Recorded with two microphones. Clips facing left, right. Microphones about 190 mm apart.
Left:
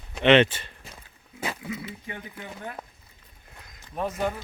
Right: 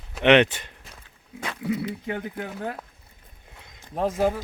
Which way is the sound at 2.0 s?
65° right (ahead or behind).